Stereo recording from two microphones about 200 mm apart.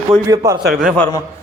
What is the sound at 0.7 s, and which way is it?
Speech, centre (ahead or behind).